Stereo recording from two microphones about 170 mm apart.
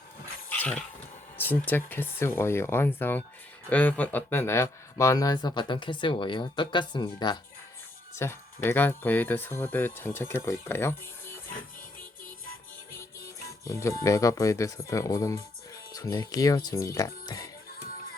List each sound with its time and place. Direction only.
0.6 s a sound: 10° left (ahead or behind)
1.4 s speech: 10° left (ahead or behind)
8.2 s speech: 15° left (ahead or behind)
13.5 s speech: 20° left (ahead or behind)
17.7 s music: 60° left (ahead or behind)